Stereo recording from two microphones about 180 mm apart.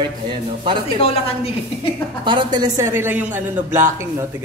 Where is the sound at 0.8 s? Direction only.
30° left (ahead or behind).